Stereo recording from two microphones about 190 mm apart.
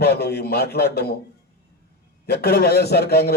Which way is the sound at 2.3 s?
55° left (ahead or behind).